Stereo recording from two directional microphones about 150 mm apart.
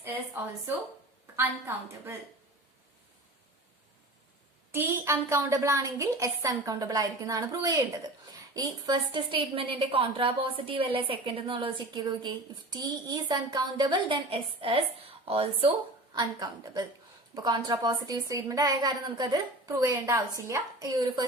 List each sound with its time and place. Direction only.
1.4 s a woman's voice: 15° right (ahead or behind)
4.7 s a woman's voice: 15° right (ahead or behind); by 15.7 s 40° right (ahead or behind)
16.1 s a woman's voice: 30° right (ahead or behind)